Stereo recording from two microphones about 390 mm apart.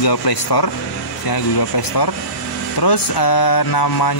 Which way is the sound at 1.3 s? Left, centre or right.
Left.